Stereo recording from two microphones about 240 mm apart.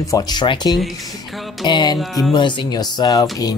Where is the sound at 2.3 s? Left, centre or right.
Centre.